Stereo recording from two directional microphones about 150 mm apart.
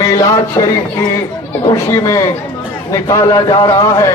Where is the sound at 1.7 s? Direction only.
20° left (ahead or behind).